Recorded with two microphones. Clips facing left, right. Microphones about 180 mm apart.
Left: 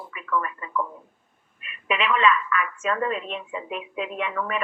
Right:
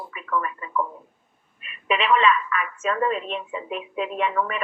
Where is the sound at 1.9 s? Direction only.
30° right (ahead or behind).